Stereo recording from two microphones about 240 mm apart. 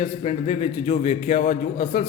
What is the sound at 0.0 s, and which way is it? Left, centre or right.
A man's voice, left.